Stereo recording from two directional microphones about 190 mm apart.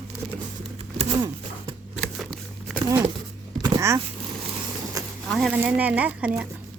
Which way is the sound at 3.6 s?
15° right (ahead or behind).